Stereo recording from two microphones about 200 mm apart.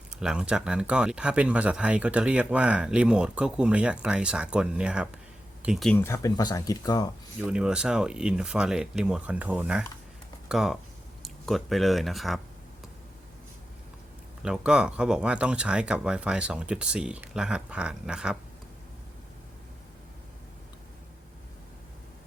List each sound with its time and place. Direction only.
0.1 s speech: 5° right (ahead or behind)
6.0 s speech: 15° left (ahead or behind)
7.3 s speech: 5° right (ahead or behind)
14.4 s speech: 5° right (ahead or behind)